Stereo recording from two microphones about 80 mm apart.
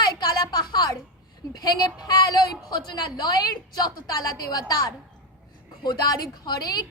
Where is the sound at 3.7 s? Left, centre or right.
Left.